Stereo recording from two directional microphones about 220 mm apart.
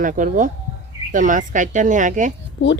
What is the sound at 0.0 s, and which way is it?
Speech, 40° right (ahead or behind).